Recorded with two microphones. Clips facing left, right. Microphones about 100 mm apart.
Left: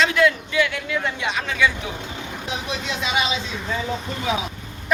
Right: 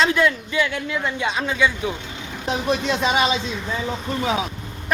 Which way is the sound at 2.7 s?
45° right (ahead or behind).